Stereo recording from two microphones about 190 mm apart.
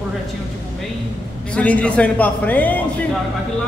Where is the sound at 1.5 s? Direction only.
5° left (ahead or behind).